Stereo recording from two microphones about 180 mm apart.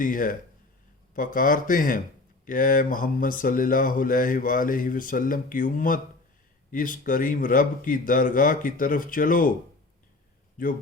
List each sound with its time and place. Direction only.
0.0 s speech: 50° left (ahead or behind)
10.6 s speech: 50° left (ahead or behind)